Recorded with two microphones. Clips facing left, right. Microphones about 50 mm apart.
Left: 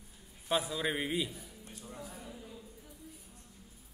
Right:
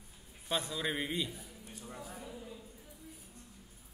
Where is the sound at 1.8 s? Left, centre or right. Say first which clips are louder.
Right 1 dB; right.